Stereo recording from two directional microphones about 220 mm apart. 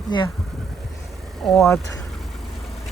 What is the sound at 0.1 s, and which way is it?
Speech, 20° left (ahead or behind).